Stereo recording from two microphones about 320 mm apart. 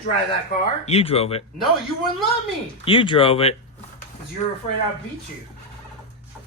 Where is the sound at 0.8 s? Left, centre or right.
Centre.